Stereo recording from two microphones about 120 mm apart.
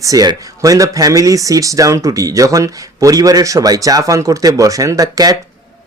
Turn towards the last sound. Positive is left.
turn(degrees=-30)  # may be behind; listen again after turning